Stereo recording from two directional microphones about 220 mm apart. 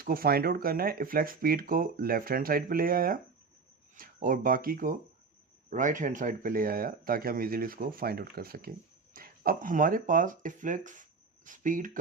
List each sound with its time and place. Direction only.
0.0 s speech: 40° right (ahead or behind)